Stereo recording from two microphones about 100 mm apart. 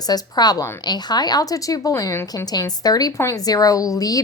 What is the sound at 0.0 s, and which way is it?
A woman's voice, 40° left (ahead or behind).